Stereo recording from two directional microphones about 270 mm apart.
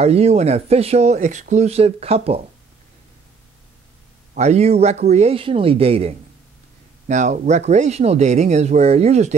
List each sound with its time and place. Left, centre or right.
0.0 s speech: right
4.4 s speech: right